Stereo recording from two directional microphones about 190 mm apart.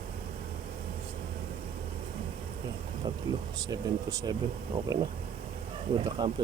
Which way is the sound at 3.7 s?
20° right (ahead or behind).